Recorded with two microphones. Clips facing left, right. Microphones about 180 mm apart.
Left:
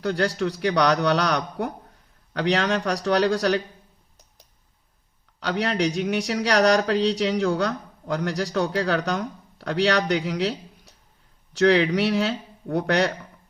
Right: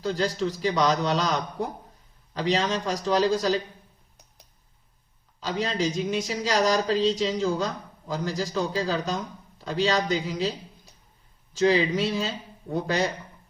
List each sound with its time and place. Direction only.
0.0 s speech: 70° left (ahead or behind)
5.4 s speech: 70° left (ahead or behind)